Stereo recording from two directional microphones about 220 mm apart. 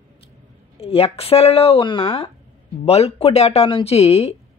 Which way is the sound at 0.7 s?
25° left (ahead or behind).